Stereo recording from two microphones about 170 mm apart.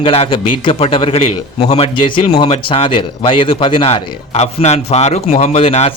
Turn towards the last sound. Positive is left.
turn(degrees=40)  # may be behind; listen again after turning